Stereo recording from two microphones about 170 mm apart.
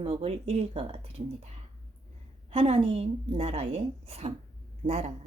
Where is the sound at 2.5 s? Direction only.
35° right (ahead or behind).